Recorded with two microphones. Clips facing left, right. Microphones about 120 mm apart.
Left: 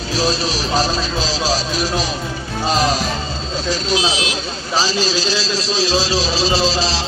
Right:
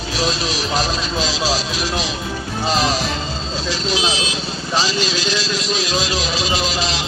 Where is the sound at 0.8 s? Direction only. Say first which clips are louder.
Left 2 dB; 40° left (ahead or behind).